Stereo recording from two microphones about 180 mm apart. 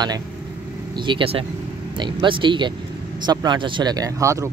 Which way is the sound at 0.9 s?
25° right (ahead or behind).